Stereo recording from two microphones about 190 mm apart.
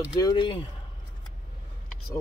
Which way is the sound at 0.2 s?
25° left (ahead or behind).